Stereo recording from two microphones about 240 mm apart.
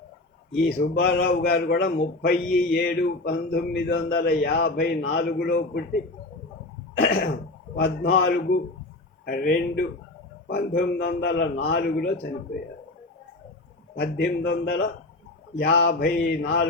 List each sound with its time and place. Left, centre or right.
0.7 s speech: left
7.8 s a man's voice: left
14.0 s a man's voice: left